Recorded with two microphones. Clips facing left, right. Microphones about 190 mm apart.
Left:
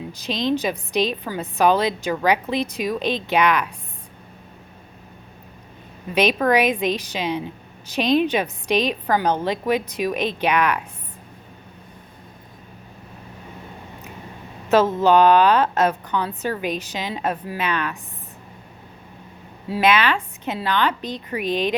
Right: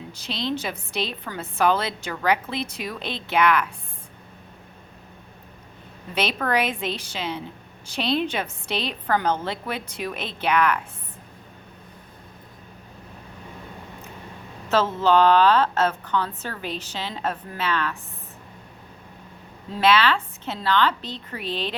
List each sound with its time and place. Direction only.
0.2 s a woman's voice: 15° left (ahead or behind)
6.1 s a woman's voice: 15° left (ahead or behind)
14.7 s a woman's voice: 15° left (ahead or behind)
19.6 s a woman's voice: 10° left (ahead or behind)